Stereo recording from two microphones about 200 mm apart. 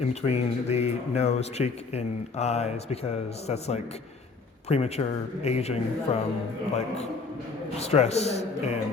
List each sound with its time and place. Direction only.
0.0 s speech: 35° left (ahead or behind)